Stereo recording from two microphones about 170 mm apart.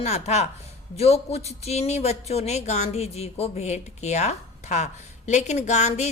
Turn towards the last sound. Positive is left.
turn(degrees=40)  # may be behind; listen again after turning